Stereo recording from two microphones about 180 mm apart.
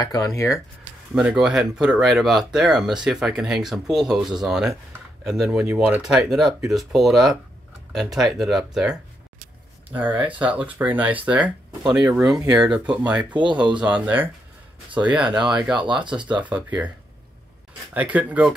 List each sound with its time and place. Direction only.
0.0 s speech: 20° left (ahead or behind)
1.1 s speech: 5° right (ahead or behind)
17.9 s speech: 10° right (ahead or behind)